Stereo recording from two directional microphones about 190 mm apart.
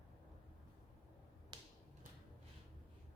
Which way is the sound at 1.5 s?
25° right (ahead or behind).